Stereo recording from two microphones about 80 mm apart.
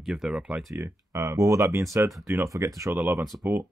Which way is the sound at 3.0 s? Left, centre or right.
Right.